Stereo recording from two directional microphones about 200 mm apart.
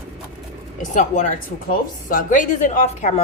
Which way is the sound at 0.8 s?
40° left (ahead or behind).